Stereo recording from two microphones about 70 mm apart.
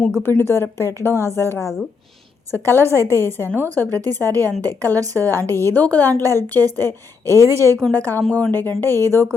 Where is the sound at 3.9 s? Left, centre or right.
Right.